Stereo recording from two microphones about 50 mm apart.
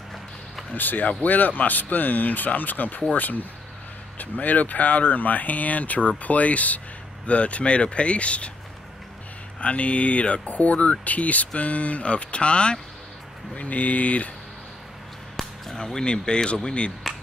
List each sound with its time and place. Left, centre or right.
0.7 s speech: left
9.6 s speech: left
15.3 s speech: centre